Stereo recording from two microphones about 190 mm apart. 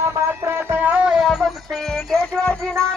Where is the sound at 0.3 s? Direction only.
10° right (ahead or behind).